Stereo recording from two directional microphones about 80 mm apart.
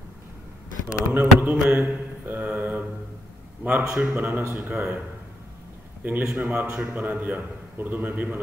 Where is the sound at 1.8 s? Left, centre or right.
Right.